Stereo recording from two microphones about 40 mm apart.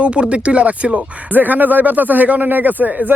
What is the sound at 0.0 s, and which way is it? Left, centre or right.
Speech, right.